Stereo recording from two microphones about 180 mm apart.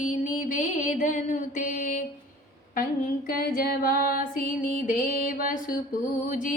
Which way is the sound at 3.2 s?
55° left (ahead or behind).